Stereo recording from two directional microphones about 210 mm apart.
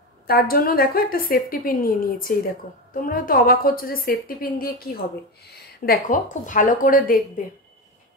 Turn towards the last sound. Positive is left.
turn(degrees=40)  # may be behind; listen again after turning